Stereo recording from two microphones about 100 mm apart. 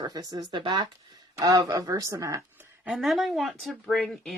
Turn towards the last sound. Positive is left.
turn(degrees=0)  # may be behind; listen again after turning